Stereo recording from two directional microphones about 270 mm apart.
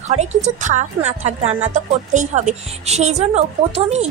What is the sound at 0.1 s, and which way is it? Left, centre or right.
A woman's voice, right.